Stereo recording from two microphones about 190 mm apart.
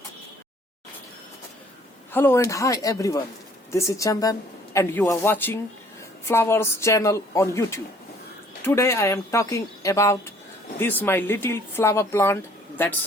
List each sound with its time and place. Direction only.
2.1 s speech: 10° left (ahead or behind)